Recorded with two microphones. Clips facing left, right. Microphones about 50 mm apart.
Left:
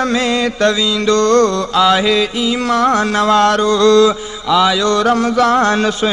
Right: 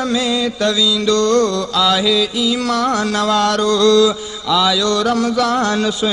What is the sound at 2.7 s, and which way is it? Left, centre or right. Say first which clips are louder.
Mantra: left 4 dB; left.